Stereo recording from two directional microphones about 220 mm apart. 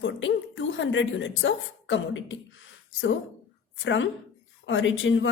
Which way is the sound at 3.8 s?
60° left (ahead or behind).